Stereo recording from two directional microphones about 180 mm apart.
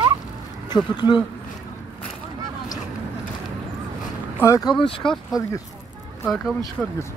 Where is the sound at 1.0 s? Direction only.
25° left (ahead or behind).